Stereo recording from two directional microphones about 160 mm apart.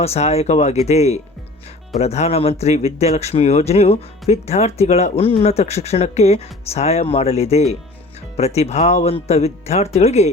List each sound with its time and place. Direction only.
0.0 s speech: 40° left (ahead or behind)